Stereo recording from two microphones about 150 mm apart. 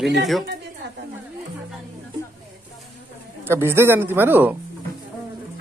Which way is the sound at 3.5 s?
15° right (ahead or behind).